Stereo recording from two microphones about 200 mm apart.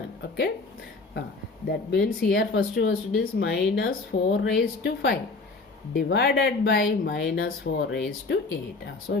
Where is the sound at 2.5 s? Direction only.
60° left (ahead or behind).